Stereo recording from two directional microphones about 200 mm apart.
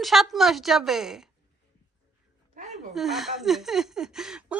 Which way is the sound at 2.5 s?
40° right (ahead or behind).